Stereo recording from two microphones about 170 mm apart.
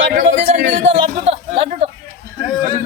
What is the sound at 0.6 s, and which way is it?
Speech, 45° right (ahead or behind).